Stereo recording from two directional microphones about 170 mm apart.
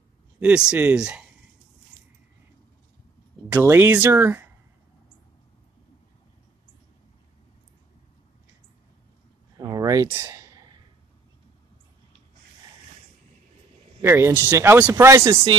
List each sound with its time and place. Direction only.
0.4 s speech: 5° right (ahead or behind)
3.5 s speech: 15° right (ahead or behind)
9.6 s a sound: 20° right (ahead or behind)
14.0 s speech: 15° right (ahead or behind)